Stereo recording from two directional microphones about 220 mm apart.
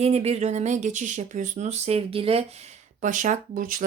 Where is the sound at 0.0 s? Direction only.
30° right (ahead or behind).